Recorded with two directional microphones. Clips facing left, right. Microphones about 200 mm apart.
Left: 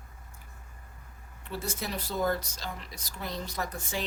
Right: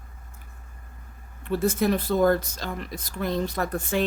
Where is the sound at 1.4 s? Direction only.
55° right (ahead or behind).